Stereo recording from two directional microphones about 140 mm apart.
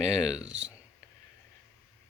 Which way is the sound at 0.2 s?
5° right (ahead or behind).